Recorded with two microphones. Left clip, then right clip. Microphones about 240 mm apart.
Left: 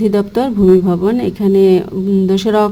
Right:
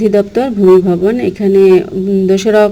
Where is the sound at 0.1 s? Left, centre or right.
Centre.